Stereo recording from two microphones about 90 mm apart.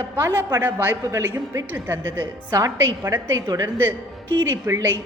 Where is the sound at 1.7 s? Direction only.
25° right (ahead or behind).